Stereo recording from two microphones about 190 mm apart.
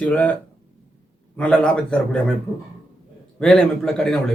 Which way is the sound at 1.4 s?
5° left (ahead or behind).